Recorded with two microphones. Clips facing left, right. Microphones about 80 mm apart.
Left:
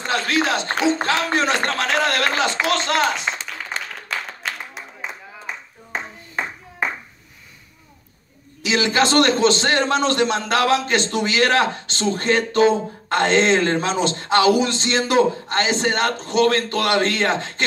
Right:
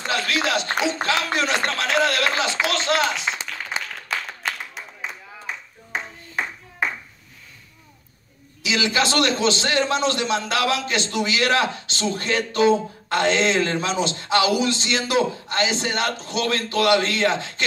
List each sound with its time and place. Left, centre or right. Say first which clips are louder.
0.0 s a man's voice: left 3 dB; left
8.6 s a man's voice: left 3 dB; left